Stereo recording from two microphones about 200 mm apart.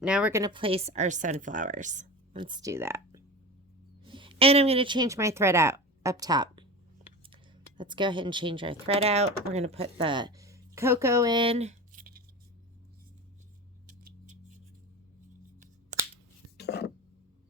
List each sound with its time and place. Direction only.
0.0 s a woman's voice: 5° right (ahead or behind)
0.4 s speech: 25° right (ahead or behind)
2.4 s speech: 20° right (ahead or behind)
4.0 s speech: 25° right (ahead or behind)
7.8 s speech: 25° right (ahead or behind); by 12.2 s 45° right (ahead or behind)
13.8 s a sound: 40° right (ahead or behind)
16.6 s filing: 55° left (ahead or behind)